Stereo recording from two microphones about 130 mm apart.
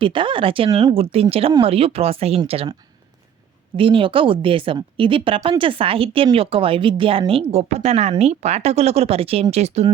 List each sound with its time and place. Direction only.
0.0 s speech: 40° right (ahead or behind)
3.8 s speech: 40° right (ahead or behind)